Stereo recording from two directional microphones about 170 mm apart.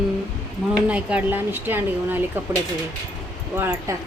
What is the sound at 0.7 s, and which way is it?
Speech, 5° right (ahead or behind).